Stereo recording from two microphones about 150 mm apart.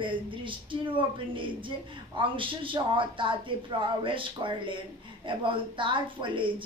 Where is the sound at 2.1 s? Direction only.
35° right (ahead or behind).